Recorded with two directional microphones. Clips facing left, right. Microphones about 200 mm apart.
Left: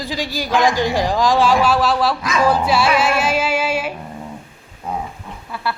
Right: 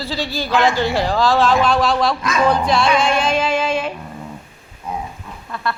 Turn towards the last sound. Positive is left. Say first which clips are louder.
# even
turn(degrees=10)  # may be behind; listen again after turning